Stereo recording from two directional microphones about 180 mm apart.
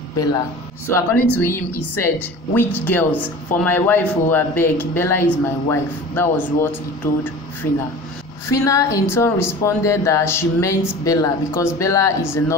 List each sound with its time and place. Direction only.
0.8 s a woman's voice: 15° left (ahead or behind)
8.5 s a woman's voice: 15° left (ahead or behind)